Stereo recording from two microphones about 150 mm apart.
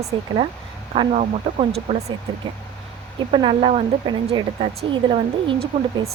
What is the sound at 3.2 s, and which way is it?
Speech, 35° right (ahead or behind).